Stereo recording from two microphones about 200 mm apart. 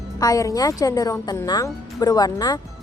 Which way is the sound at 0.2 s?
15° left (ahead or behind).